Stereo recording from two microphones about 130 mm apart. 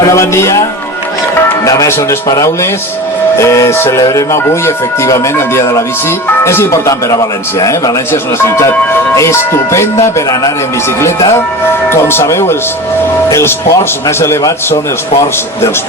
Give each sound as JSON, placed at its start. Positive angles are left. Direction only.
{"t": 0.1, "sound": "speech", "side_deg": 20}
{"t": 1.6, "sound": "speech", "side_deg": 25}